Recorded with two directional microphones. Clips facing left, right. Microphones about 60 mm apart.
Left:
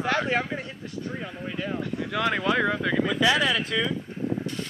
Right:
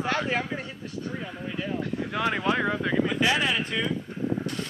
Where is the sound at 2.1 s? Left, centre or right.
Left.